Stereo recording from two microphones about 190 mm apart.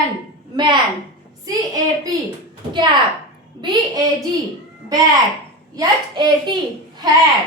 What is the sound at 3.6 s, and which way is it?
Speech, 25° right (ahead or behind).